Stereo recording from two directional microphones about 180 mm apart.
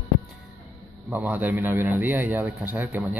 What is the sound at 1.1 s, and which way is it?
Speech, 10° right (ahead or behind).